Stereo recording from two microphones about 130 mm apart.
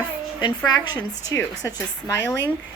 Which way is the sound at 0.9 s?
30° left (ahead or behind).